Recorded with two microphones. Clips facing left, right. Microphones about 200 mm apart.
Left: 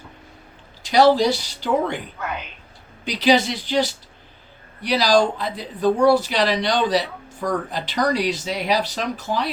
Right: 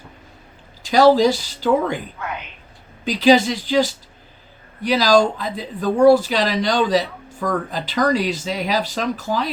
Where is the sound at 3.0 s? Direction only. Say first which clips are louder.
Right 4 dB; 45° right (ahead or behind).